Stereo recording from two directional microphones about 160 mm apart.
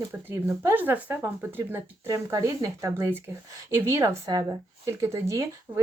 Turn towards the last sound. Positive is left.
turn(degrees=-20)  # may be behind; listen again after turning